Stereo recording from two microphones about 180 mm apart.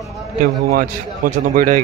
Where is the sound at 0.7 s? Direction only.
50° right (ahead or behind).